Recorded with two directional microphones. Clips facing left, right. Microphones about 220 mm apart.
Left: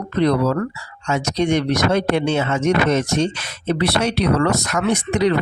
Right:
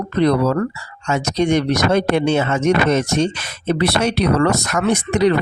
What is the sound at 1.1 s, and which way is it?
Speech, 45° right (ahead or behind).